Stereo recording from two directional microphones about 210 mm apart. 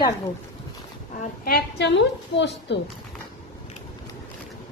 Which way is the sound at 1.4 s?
50° left (ahead or behind).